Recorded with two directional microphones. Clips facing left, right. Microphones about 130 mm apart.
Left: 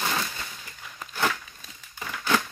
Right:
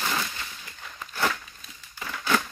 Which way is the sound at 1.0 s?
15° left (ahead or behind).